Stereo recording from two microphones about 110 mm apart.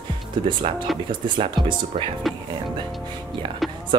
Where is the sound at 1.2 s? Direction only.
45° right (ahead or behind).